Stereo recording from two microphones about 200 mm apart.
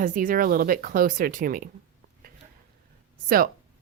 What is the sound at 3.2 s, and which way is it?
Speech, 45° right (ahead or behind).